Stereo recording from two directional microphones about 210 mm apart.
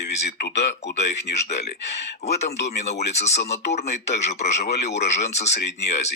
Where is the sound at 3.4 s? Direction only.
55° left (ahead or behind).